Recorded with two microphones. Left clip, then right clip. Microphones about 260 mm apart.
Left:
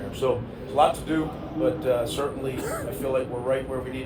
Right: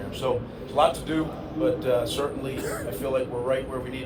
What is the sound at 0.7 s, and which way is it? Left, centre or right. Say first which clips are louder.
A man's voice: left 1 dB; right.